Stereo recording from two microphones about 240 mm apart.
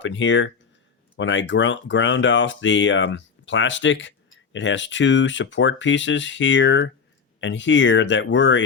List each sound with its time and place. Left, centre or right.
0.0 s speech: left